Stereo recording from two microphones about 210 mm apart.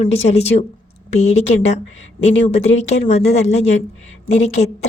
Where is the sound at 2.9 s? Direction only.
30° left (ahead or behind).